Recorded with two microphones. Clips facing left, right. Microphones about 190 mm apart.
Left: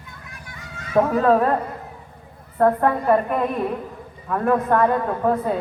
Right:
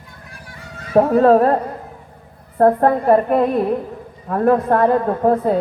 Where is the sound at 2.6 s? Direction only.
35° right (ahead or behind).